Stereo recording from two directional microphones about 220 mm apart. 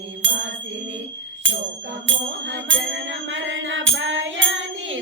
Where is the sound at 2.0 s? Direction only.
60° right (ahead or behind).